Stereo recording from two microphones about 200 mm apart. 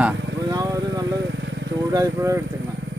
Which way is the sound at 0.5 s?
20° right (ahead or behind).